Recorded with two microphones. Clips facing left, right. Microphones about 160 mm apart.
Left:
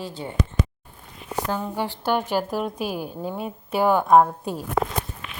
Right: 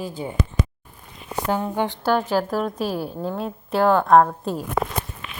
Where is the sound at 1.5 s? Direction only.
20° right (ahead or behind).